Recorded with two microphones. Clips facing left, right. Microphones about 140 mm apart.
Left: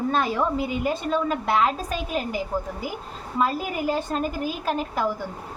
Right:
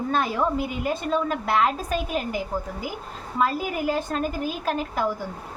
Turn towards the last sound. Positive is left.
turn(degrees=0)  # may be behind; listen again after turning